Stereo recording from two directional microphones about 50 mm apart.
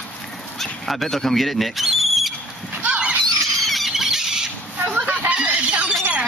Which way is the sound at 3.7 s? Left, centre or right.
Centre.